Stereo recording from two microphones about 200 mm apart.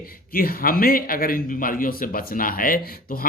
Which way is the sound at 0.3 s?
45° left (ahead or behind).